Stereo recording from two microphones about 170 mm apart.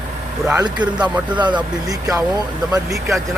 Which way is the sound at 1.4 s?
25° right (ahead or behind).